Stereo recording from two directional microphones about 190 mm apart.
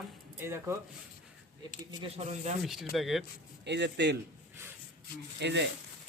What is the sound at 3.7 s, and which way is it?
Speech, 65° right (ahead or behind).